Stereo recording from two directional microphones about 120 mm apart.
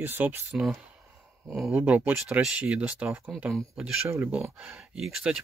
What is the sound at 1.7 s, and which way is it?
Speech, 15° right (ahead or behind).